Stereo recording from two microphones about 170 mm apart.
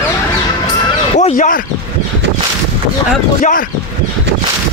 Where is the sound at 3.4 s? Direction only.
50° left (ahead or behind).